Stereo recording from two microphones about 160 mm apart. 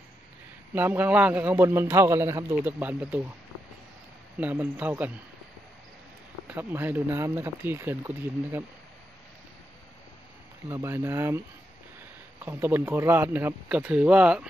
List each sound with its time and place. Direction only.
0.7 s a man's voice: 10° right (ahead or behind)
4.4 s a man's voice: 10° right (ahead or behind)
6.4 s a man's voice: 10° right (ahead or behind)
10.7 s a man's voice: 15° right (ahead or behind)
12.4 s a man's voice: 15° right (ahead or behind)